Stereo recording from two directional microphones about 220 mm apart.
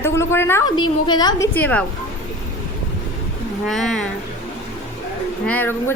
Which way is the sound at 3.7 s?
Centre (ahead or behind).